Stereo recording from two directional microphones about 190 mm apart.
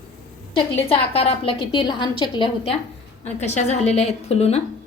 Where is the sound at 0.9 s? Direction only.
30° left (ahead or behind).